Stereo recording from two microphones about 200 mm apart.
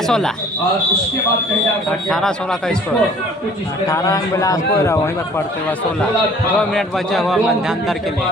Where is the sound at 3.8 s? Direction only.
15° left (ahead or behind).